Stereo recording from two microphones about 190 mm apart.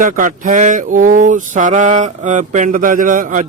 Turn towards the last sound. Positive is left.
turn(degrees=-45)  # may be behind; listen again after turning